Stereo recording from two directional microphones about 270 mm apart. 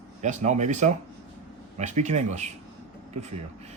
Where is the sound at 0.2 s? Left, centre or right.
Right.